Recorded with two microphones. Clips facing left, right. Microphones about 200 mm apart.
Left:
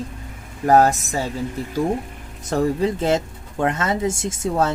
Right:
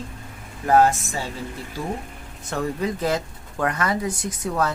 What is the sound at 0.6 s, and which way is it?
Speech, 40° left (ahead or behind).